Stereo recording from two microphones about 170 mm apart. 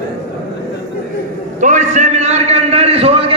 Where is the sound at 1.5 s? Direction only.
45° right (ahead or behind).